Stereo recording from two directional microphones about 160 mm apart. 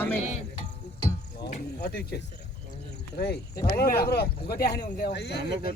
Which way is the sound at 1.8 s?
85° left.